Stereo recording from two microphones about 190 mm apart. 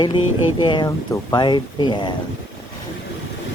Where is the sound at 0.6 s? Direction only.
25° left (ahead or behind).